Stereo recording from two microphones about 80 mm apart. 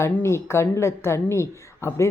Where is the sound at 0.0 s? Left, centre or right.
Left.